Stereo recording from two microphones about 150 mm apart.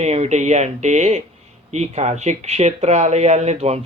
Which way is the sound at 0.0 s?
45° right (ahead or behind).